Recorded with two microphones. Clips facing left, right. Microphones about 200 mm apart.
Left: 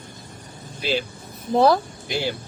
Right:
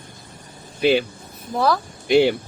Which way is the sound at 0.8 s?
65° right (ahead or behind).